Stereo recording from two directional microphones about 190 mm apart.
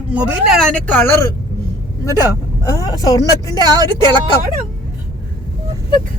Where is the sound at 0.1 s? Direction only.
5° right (ahead or behind); by 1.3 s 10° left (ahead or behind).